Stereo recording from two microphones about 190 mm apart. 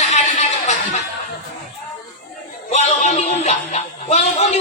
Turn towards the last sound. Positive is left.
turn(degrees=35)  # may be behind; listen again after turning